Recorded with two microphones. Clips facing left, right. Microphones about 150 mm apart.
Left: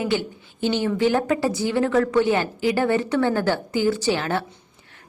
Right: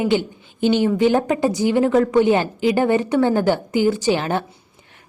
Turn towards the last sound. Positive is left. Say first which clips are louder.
# right 3 dB
turn(degrees=-15)  # may be behind; listen again after turning